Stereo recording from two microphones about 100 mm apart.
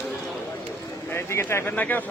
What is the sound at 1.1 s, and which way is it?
Speech, 25° left (ahead or behind).